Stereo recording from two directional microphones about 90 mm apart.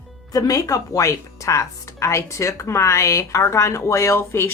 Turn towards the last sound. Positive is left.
turn(degrees=30)  # may be behind; listen again after turning